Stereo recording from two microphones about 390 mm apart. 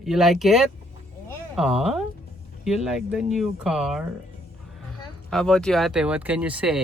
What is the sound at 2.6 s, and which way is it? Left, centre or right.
Speech, centre.